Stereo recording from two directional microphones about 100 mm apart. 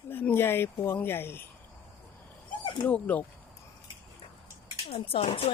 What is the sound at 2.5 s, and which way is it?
Dog, 50° left (ahead or behind).